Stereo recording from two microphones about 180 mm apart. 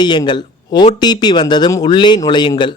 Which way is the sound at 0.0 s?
25° left (ahead or behind).